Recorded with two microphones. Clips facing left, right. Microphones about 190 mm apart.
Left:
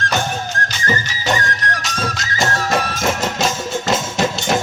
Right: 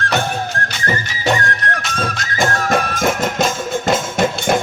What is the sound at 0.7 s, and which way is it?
Music, 60° right (ahead or behind).